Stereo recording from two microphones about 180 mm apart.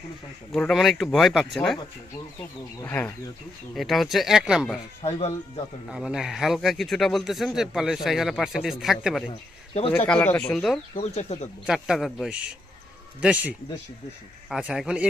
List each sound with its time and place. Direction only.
0.5 s speech: 5° left (ahead or behind)
2.8 s speech: 10° left (ahead or behind)
3.8 s speech: centre (ahead or behind)
5.9 s speech: centre (ahead or behind)
10.9 s speech: 40° left (ahead or behind)
11.6 s speech: centre (ahead or behind)
14.5 s speech: 5° right (ahead or behind)